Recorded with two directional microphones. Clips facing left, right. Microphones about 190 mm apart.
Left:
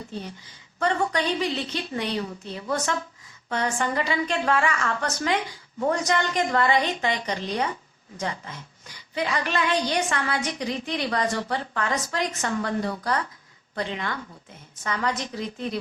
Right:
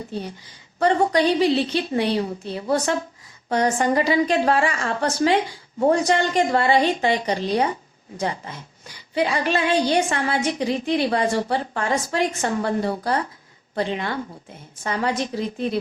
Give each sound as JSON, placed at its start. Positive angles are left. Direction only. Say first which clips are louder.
{"t": 0.8, "sound": "a woman's voice", "louder": "right 6 dB", "side_deg": -35}